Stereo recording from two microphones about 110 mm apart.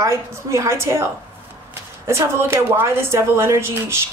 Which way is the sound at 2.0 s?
25° right (ahead or behind).